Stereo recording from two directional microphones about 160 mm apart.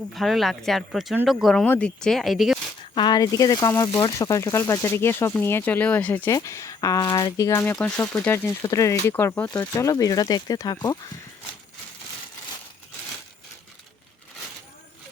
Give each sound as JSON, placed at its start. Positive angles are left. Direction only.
{"t": 0.1, "sound": "speech", "side_deg": 0}
{"t": 2.9, "sound": "speech", "side_deg": 25}
{"t": 7.6, "sound": "speech", "side_deg": 10}
{"t": 8.6, "sound": "speech", "side_deg": 20}
{"t": 9.7, "sound": "speech", "side_deg": 20}